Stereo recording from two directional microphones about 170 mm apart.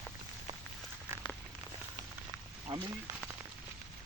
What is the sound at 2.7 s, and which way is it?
Speech, 30° right (ahead or behind).